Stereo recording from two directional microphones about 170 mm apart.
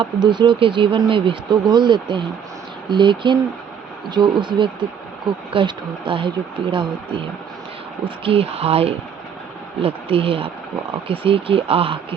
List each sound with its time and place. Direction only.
0.0 s speech: 25° right (ahead or behind)